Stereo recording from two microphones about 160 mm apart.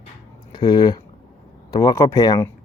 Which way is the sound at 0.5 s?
25° left (ahead or behind).